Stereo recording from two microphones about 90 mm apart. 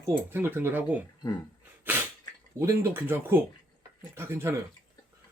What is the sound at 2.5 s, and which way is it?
Speech, 30° right (ahead or behind).